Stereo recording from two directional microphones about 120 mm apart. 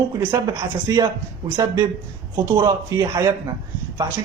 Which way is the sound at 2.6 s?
30° right (ahead or behind).